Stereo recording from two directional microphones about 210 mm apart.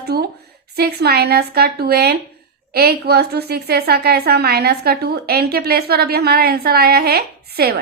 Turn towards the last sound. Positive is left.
turn(degrees=-50)  # may be behind; listen again after turning